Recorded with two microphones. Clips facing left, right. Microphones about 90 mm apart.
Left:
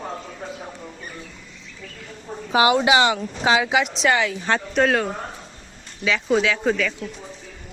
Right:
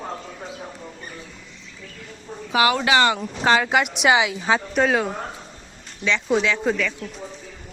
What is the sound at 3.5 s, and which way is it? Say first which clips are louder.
Speech: right 1 dB; 5° left (ahead or behind).